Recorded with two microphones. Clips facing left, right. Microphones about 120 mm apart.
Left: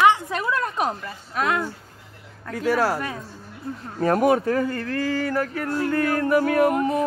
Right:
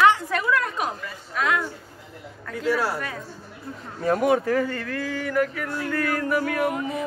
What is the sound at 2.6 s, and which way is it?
Speech, 45° left (ahead or behind).